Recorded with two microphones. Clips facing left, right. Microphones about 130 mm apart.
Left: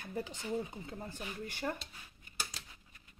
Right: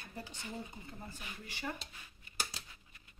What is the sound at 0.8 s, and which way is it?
Speech, 65° left (ahead or behind).